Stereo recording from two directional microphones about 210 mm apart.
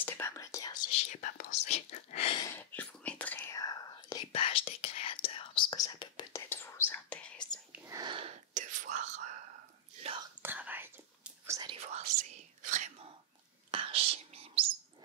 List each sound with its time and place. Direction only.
0.0 s speech: 10° left (ahead or behind)
0.9 s whispering: 35° left (ahead or behind)
2.4 s whispering: 10° left (ahead or behind)
7.7 s whispering: 15° right (ahead or behind); by 9.4 s 35° right (ahead or behind)
10.4 s whispering: 10° right (ahead or behind)
12.6 s whispering: 35° right (ahead or behind)